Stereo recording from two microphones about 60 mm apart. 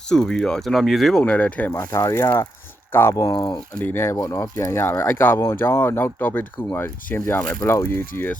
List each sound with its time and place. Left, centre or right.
0.1 s speech: centre
1.2 s speech: left
1.9 s speech: left
2.9 s speech: left
4.1 s speech: left
4.9 s speech: left